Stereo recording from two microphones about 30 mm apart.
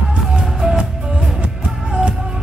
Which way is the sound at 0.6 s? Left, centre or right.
Right.